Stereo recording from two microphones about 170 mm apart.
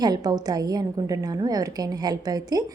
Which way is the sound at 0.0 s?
20° right (ahead or behind).